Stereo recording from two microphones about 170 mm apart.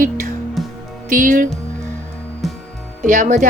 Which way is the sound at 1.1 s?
55° right (ahead or behind).